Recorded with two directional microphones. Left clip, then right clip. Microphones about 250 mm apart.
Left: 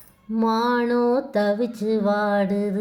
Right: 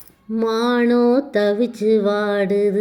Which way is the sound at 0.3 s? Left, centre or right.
Centre.